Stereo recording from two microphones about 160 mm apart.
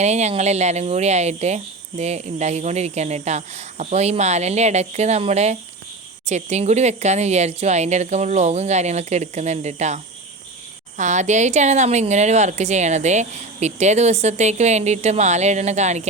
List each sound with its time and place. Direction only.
0.0 s speech: 45° right (ahead or behind)